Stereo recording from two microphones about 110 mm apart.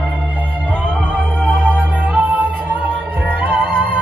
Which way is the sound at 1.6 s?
15° right (ahead or behind).